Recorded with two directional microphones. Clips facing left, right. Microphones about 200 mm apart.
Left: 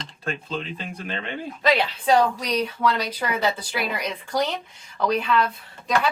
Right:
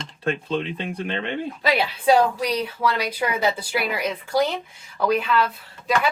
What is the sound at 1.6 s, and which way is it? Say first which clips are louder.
A woman's voice: right 1 dB; 10° right (ahead or behind).